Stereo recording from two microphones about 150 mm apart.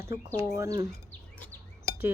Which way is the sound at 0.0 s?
20° right (ahead or behind).